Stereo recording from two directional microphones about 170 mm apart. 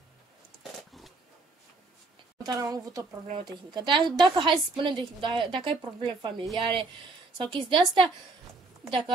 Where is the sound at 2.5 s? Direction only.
20° right (ahead or behind).